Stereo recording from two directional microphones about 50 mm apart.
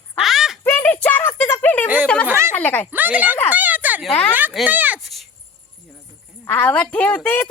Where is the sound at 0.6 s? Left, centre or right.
Left.